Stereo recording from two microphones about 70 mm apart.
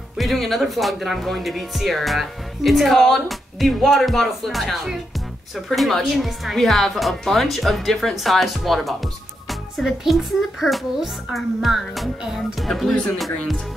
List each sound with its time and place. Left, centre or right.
0.2 s speech: centre